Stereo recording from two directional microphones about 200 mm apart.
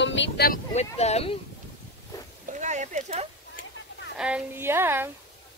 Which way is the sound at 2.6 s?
35° right (ahead or behind).